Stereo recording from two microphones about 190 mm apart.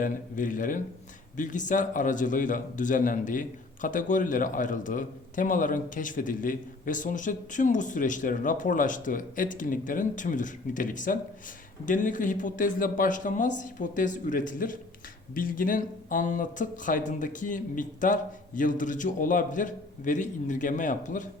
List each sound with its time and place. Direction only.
0.0 s a man's voice: 45° left (ahead or behind)